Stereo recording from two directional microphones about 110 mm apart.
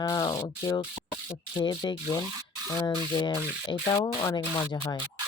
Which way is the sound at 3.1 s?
40° left (ahead or behind).